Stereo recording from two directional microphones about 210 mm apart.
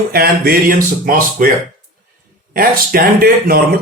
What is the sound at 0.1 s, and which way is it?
Speech, 45° right (ahead or behind).